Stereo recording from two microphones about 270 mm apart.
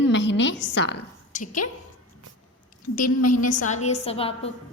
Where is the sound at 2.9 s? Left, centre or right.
Left.